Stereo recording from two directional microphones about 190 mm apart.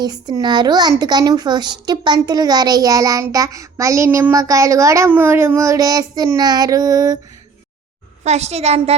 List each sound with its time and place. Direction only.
0.0 s speech: 20° right (ahead or behind)
8.2 s a woman's voice: 35° right (ahead or behind)